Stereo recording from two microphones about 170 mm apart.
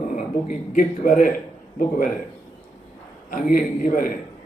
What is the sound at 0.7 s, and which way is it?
Speech, 50° left (ahead or behind).